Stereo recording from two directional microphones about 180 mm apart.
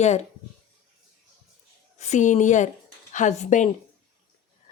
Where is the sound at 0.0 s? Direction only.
40° left (ahead or behind).